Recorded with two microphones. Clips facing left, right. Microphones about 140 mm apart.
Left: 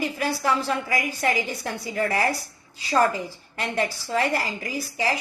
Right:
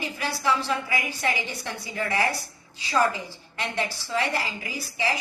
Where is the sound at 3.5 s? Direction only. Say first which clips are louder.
Left 3 dB; 40° left (ahead or behind).